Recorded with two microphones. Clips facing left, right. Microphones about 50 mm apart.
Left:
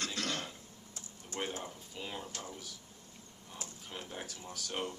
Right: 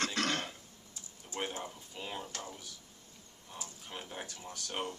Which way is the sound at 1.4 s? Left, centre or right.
Centre.